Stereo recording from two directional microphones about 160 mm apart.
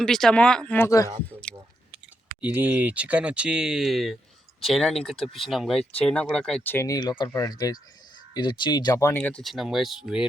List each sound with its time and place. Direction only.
0.0 s speech: 5° left (ahead or behind); by 1.1 s 20° left (ahead or behind)
1.4 s chewing: 5° left (ahead or behind)
2.4 s speech: 10° right (ahead or behind)